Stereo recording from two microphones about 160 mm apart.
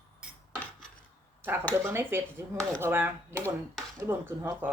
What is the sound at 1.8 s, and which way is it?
Speech, 15° right (ahead or behind).